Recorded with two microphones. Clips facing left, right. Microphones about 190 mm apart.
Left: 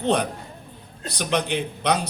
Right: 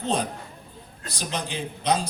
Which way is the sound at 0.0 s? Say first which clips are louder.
Left 4 dB; 65° left (ahead or behind).